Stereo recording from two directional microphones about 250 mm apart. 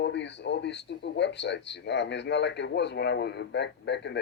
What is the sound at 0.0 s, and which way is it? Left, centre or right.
A man's voice, left.